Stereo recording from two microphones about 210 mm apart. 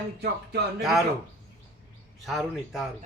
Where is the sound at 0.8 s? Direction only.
Centre (ahead or behind).